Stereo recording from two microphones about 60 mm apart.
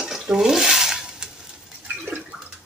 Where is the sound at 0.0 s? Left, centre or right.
Centre.